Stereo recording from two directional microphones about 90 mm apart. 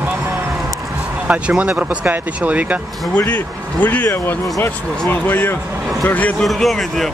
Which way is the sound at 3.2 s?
20° left (ahead or behind).